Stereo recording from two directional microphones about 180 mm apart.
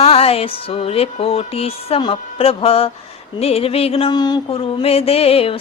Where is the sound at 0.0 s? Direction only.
35° left (ahead or behind).